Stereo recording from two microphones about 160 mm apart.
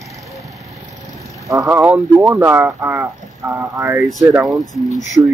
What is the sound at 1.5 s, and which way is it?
Speech, 15° right (ahead or behind).